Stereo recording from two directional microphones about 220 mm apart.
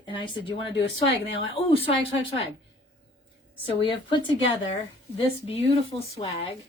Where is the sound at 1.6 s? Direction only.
25° left (ahead or behind).